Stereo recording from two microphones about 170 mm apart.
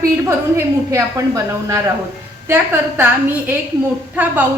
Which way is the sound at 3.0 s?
10° right (ahead or behind).